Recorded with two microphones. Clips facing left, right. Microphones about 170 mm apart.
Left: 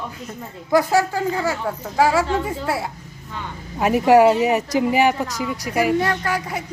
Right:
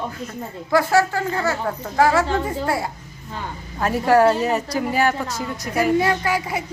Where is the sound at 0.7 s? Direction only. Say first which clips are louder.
Even; 15° left (ahead or behind).